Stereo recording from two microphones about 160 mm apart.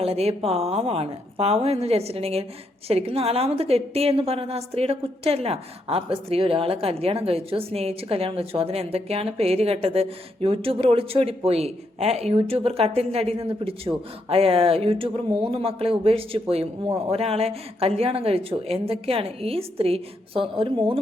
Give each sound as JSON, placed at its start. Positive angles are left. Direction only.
{"t": 0.0, "sound": "a woman's voice", "side_deg": -40}